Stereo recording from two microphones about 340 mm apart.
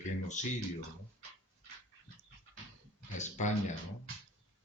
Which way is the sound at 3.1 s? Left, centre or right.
Left.